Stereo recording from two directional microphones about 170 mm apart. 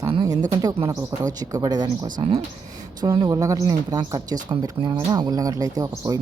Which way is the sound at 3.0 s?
25° right (ahead or behind).